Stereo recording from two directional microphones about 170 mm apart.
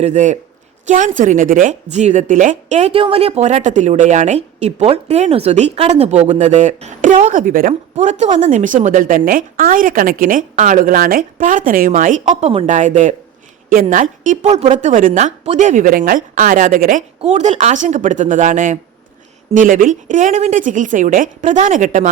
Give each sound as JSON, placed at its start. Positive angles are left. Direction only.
{"t": 0.0, "sound": "a woman's voice", "side_deg": -45}
{"t": 7.7, "sound": "a woman's voice", "side_deg": -45}